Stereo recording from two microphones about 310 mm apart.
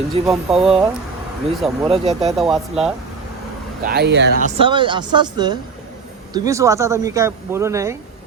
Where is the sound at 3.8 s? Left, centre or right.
Right.